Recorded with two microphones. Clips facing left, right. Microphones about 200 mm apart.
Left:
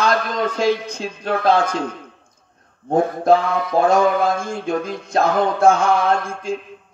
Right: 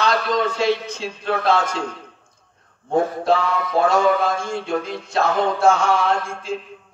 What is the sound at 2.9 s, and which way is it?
Speech, 45° left (ahead or behind).